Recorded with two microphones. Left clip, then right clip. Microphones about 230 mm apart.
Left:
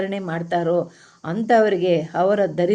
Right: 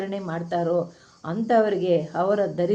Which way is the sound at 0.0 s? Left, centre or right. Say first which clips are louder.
Left 4 dB; left.